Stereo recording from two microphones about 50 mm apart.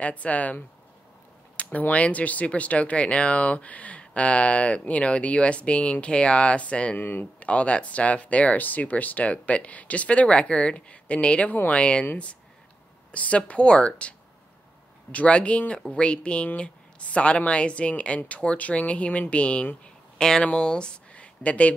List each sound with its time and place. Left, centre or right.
0.0 s speech: left
7.0 s speech: left
7.3 s speech: left
13.1 s speech: left
20.2 s speech: centre; by 21.7 s left